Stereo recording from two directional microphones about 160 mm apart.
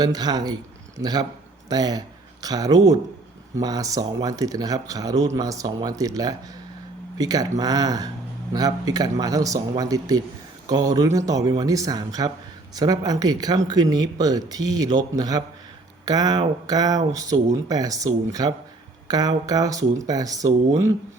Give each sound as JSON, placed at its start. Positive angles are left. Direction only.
{"t": 0.0, "sound": "a man's voice", "side_deg": -25}